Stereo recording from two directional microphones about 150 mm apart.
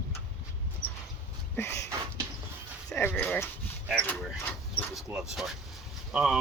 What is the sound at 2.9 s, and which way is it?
Speech, 15° left (ahead or behind).